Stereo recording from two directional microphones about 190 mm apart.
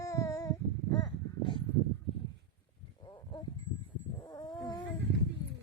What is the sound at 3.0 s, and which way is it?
Wild animals, 20° left (ahead or behind).